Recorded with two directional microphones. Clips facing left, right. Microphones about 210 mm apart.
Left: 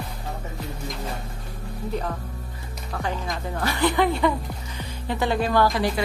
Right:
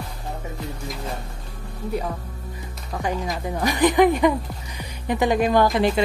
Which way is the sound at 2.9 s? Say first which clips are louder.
Right 3 dB; 15° right (ahead or behind).